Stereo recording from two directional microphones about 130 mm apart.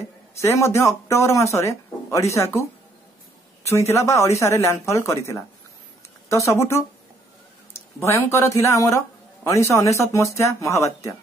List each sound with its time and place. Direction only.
0.3 s speech: 20° left (ahead or behind)
3.6 s speech: 20° left (ahead or behind)